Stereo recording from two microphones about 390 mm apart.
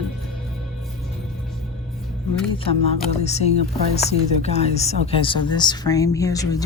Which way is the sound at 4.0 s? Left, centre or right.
Centre.